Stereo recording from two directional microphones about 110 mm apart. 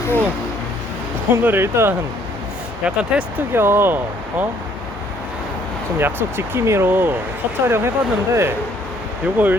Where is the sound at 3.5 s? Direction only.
20° right (ahead or behind).